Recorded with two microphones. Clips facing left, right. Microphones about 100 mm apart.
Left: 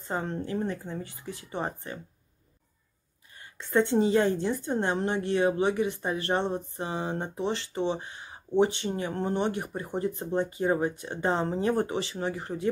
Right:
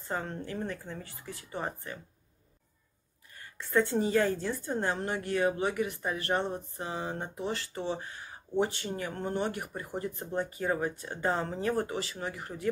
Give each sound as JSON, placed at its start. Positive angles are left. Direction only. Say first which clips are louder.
{"t": 0.1, "sound": "a woman's voice", "louder": "left 4 dB", "side_deg": 20}
{"t": 3.3, "sound": "a woman's voice", "louder": "left 3 dB", "side_deg": 20}